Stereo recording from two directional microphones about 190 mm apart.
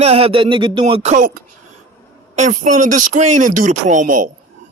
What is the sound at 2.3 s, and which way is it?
Speech, 40° right (ahead or behind).